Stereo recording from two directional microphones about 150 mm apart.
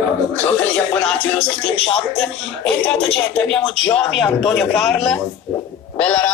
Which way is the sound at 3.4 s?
5° left (ahead or behind).